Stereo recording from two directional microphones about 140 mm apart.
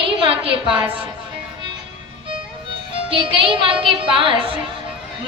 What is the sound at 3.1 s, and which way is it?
A woman's voice, 40° right (ahead or behind).